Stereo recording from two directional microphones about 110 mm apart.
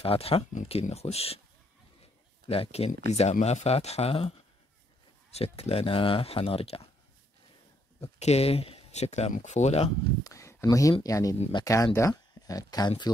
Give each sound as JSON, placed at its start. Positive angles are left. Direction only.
{"t": 0.0, "sound": "speech", "side_deg": 60}
{"t": 2.4, "sound": "speech", "side_deg": 60}
{"t": 5.3, "sound": "speech", "side_deg": 65}
{"t": 8.0, "sound": "speech", "side_deg": 70}
{"t": 10.2, "sound": "speech", "side_deg": 25}